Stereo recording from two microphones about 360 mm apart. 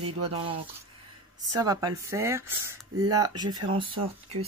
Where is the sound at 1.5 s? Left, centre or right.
Centre.